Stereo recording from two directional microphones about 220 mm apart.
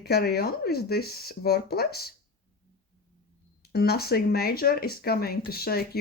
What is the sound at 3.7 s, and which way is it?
Speech, 45° left (ahead or behind).